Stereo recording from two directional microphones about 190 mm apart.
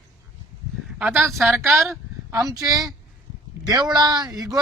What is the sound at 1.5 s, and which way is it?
Speech, 15° right (ahead or behind).